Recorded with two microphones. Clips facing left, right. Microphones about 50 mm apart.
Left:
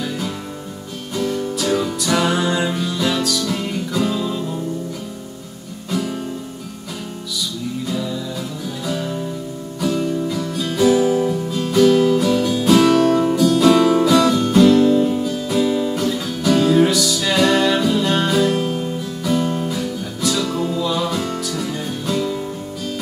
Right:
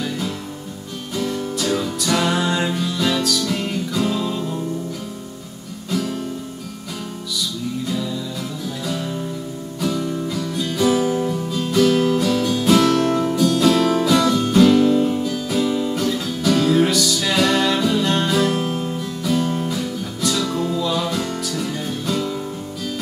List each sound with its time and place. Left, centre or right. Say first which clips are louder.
1.1 s music: left 2 dB; centre
5.9 s music: even; centre
7.9 s music: left 1 dB; centre